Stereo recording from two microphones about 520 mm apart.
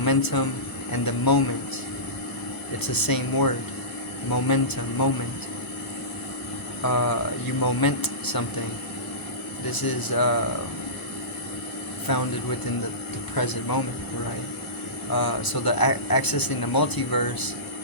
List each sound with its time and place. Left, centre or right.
0.0 s speech: left
2.8 s speech: left
6.8 s speech: left
9.6 s speech: left
12.1 s speech: left
13.3 s speech: left
15.1 s speech: left